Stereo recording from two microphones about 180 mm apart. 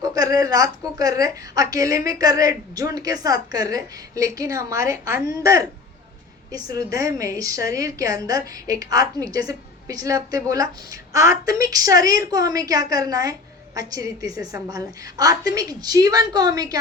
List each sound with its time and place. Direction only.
0.0 s a woman's voice: 20° right (ahead or behind)